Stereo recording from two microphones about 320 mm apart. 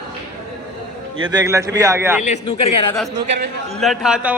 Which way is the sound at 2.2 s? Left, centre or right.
Centre.